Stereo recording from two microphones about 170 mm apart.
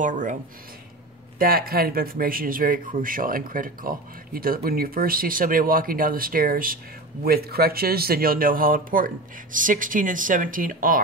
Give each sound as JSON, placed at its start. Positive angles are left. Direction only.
{"t": 0.0, "sound": "speech", "side_deg": -50}
{"t": 1.4, "sound": "speech", "side_deg": -60}